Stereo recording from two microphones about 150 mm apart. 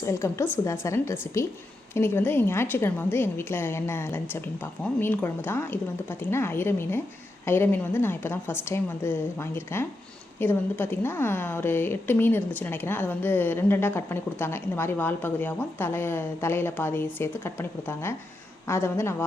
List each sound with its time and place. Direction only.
0.0 s a woman's voice: 20° left (ahead or behind)